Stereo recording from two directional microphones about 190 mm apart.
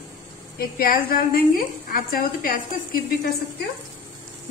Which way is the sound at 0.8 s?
50° left (ahead or behind).